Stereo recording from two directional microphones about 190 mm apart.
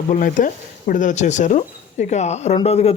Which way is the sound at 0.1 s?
45° left (ahead or behind).